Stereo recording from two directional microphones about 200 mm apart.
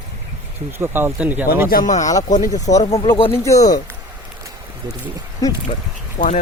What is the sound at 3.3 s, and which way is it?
Speech, 15° left (ahead or behind).